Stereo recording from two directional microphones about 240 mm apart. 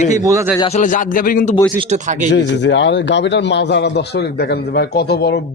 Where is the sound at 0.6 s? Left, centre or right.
Left.